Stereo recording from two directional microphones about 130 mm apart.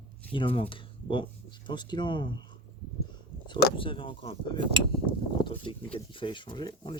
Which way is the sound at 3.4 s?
40° left (ahead or behind).